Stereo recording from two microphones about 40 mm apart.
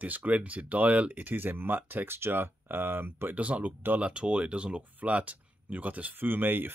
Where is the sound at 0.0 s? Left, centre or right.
Right.